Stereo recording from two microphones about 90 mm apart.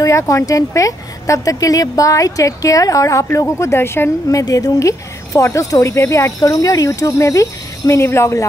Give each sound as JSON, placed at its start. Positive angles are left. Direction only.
{"t": 0.0, "sound": "speech", "side_deg": 35}
{"t": 4.4, "sound": "speech", "side_deg": 40}